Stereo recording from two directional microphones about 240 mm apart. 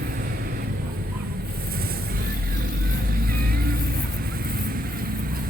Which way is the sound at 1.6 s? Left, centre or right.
Right.